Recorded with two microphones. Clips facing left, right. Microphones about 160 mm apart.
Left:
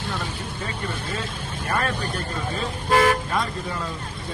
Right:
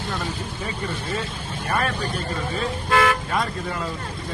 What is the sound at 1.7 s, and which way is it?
Speech, 10° right (ahead or behind).